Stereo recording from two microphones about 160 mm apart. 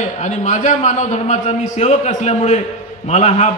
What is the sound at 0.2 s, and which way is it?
A man's voice, 45° left (ahead or behind).